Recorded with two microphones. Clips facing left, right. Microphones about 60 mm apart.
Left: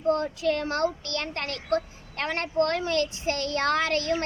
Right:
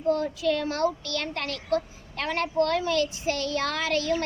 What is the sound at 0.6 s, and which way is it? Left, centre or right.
A child's voice, left.